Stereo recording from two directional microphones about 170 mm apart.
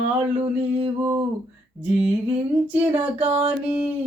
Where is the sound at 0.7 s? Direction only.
35° right (ahead or behind).